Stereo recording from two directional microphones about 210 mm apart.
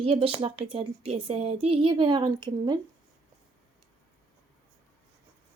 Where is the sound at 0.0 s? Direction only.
25° right (ahead or behind).